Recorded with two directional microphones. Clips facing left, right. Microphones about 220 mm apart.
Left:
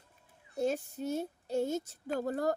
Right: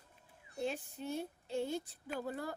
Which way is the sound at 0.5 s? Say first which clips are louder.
Left 7 dB; 45° left (ahead or behind).